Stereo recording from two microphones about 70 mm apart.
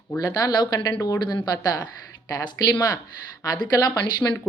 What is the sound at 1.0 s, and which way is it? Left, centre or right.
Speech, left.